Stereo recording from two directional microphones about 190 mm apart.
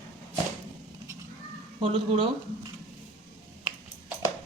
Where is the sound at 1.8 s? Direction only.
30° right (ahead or behind).